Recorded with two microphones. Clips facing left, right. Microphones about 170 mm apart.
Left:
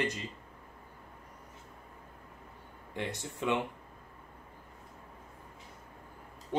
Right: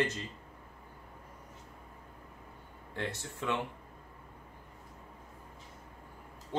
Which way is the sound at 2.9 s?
15° left (ahead or behind).